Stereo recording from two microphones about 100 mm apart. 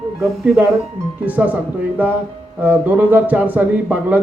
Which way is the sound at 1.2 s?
15° right (ahead or behind).